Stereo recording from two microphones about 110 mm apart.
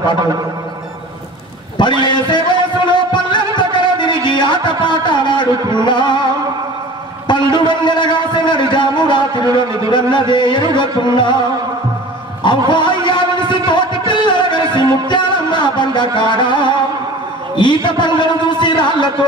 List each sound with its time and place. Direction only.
1.8 s a sound: 45° left (ahead or behind)
5.7 s music: 45° left (ahead or behind)
7.2 s a man's voice: 45° left (ahead or behind)
9.8 s music: 45° left (ahead or behind)
12.4 s a man's voice: 45° left (ahead or behind)
17.6 s music: 45° left (ahead or behind)